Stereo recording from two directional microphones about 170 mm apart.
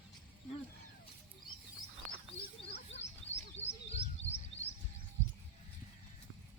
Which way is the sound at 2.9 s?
40° left (ahead or behind).